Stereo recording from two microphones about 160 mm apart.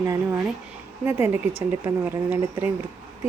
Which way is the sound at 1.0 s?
15° right (ahead or behind).